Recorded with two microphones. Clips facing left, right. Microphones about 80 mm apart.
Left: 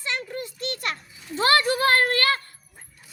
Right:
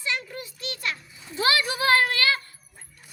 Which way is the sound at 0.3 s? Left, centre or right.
Left.